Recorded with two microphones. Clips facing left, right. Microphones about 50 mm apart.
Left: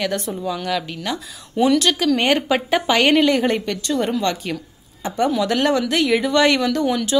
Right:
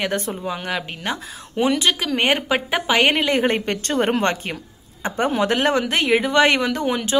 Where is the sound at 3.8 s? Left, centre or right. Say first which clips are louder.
Right 1 dB; right.